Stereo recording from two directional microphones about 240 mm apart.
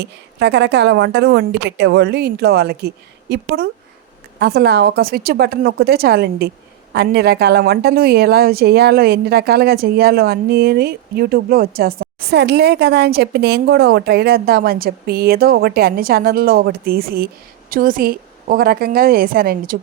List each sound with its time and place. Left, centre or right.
0.0 s a woman's voice: right